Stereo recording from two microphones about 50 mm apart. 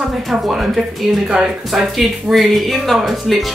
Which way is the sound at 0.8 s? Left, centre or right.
Centre.